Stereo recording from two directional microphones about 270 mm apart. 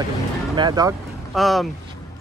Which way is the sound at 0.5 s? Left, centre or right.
Centre.